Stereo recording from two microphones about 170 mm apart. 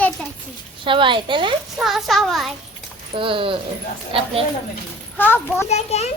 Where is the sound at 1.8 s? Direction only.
Centre (ahead or behind).